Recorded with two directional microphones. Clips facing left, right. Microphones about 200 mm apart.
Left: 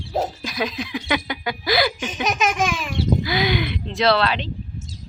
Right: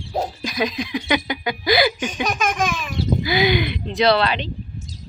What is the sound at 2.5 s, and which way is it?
A child's voice, 10° left (ahead or behind).